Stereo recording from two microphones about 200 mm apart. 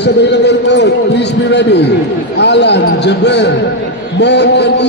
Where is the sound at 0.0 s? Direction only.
60° left (ahead or behind).